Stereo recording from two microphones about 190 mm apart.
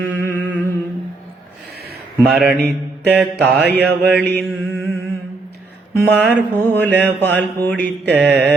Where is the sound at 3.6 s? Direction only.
60° right (ahead or behind).